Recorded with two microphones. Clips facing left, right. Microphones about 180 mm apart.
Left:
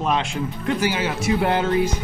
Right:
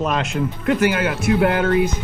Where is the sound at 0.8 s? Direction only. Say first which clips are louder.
Right 4 dB; 60° right (ahead or behind).